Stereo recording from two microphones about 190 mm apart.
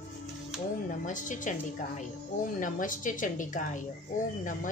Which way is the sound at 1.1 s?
40° left (ahead or behind).